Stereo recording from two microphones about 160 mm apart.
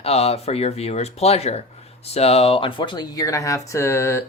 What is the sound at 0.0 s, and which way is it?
Speech, 40° left (ahead or behind).